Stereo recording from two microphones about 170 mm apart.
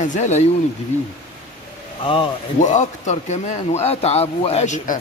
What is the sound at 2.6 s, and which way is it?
A man's voice, 45° left (ahead or behind).